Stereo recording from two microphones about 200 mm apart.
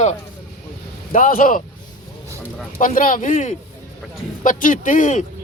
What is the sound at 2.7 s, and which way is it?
Speech, 40° left (ahead or behind).